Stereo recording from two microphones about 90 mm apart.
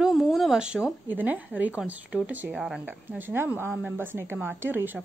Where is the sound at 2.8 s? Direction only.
20° right (ahead or behind).